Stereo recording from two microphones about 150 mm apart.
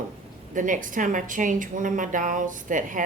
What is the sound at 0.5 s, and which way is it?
A woman's voice, 60° right (ahead or behind).